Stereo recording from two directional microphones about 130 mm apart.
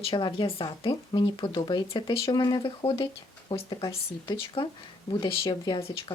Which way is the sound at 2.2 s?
30° left (ahead or behind).